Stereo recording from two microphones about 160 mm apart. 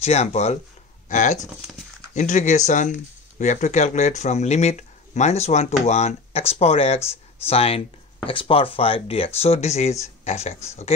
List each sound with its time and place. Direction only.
0.0 s speech: 40° left (ahead or behind)